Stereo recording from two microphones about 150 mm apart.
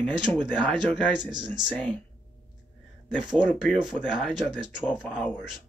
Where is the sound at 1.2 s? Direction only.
30° right (ahead or behind).